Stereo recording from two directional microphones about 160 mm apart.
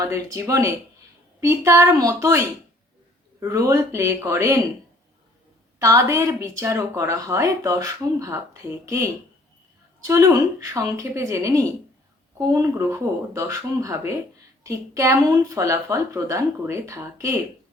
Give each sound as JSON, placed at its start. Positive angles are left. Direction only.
{"t": 0.0, "sound": "a woman's voice", "side_deg": -20}
{"t": 5.8, "sound": "a woman's voice", "side_deg": -20}
{"t": 10.0, "sound": "a woman's voice", "side_deg": -20}